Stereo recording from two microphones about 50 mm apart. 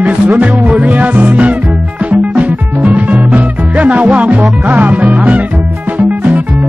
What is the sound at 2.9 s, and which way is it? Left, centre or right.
Music, right.